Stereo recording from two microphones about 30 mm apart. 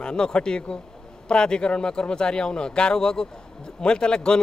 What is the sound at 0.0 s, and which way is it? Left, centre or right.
Speech, left.